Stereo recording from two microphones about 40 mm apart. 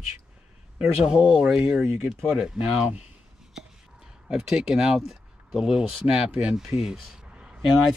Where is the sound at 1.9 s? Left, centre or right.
Right.